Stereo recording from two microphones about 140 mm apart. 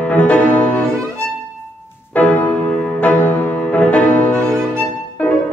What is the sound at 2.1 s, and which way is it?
Music, 10° left (ahead or behind).